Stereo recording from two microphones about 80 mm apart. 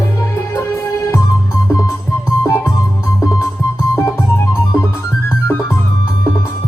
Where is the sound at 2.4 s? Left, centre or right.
Left.